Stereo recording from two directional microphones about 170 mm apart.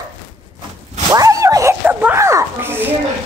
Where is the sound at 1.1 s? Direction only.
20° right (ahead or behind).